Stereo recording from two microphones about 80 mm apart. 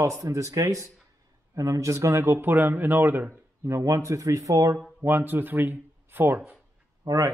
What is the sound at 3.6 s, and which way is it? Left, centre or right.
Speech, right.